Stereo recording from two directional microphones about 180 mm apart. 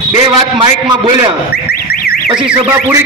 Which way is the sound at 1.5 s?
60° left (ahead or behind).